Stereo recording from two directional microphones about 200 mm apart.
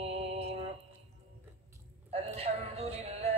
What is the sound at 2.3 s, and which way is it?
Music, 30° right (ahead or behind).